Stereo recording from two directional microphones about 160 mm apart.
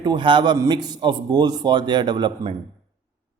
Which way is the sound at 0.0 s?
30° right (ahead or behind).